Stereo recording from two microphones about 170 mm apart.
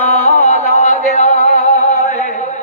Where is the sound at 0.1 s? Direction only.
40° left (ahead or behind).